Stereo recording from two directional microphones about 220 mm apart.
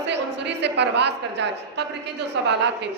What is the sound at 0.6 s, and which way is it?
Speech, 50° right (ahead or behind).